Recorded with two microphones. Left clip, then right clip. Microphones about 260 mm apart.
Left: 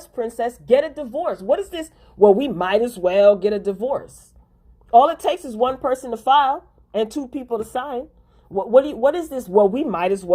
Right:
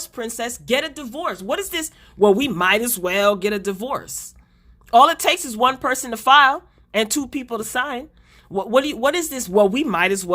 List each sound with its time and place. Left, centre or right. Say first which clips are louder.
0.2 s a woman's voice: left 4 dB; right